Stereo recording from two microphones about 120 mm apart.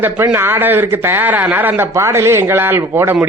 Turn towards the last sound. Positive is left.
turn(degrees=-20)  # may be behind; listen again after turning